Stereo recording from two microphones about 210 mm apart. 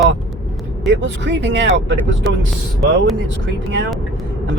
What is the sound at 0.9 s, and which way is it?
Speech, 60° right (ahead or behind).